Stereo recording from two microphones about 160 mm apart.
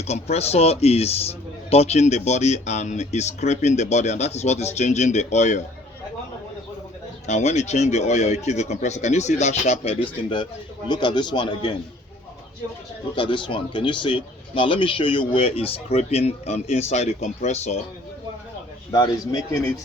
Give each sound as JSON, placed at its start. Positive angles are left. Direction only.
{"t": 0.0, "sound": "a man's voice", "side_deg": 40}
{"t": 7.3, "sound": "a man's voice", "side_deg": 45}
{"t": 13.1, "sound": "speech", "side_deg": 30}
{"t": 18.9, "sound": "speech", "side_deg": 25}